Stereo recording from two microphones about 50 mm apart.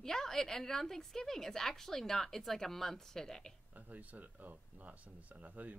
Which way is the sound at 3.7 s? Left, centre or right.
Right.